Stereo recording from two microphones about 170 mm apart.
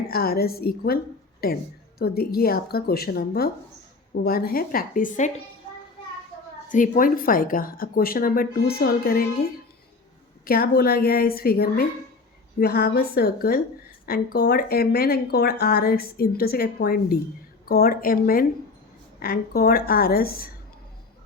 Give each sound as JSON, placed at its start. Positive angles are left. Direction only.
{"t": 0.1, "sound": "speech", "side_deg": 65}
{"t": 6.7, "sound": "speech", "side_deg": 50}
{"t": 10.4, "sound": "speech", "side_deg": 60}